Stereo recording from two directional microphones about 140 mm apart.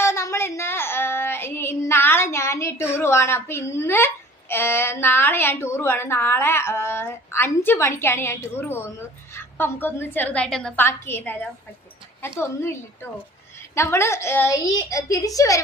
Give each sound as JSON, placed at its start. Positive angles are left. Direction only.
{"t": 0.0, "sound": "child singing", "side_deg": 20}
{"t": 10.8, "sound": "a woman's voice", "side_deg": 15}
{"t": 13.7, "sound": "a woman's voice", "side_deg": 20}